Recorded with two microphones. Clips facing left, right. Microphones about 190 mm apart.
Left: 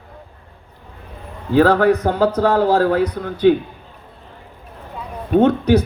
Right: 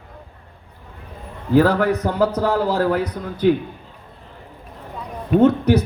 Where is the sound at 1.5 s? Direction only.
70° left (ahead or behind).